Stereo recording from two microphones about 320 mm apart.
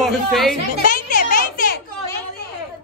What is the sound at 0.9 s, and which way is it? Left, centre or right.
Music, left.